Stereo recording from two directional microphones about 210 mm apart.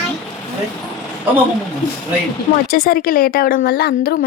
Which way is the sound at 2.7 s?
45° left (ahead or behind).